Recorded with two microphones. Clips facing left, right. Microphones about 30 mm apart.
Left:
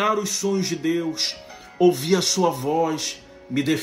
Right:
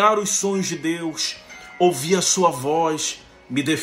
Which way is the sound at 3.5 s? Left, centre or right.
Right.